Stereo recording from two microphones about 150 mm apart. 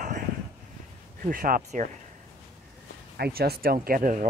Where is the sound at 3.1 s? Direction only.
90° right; by 4.3 s 60° right (ahead or behind).